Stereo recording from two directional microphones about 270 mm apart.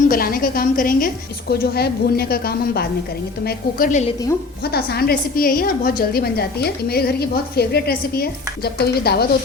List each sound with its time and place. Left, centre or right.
0.1 s a woman's voice: left